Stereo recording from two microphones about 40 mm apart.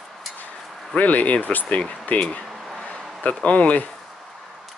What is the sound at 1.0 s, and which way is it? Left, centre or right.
Speech, left.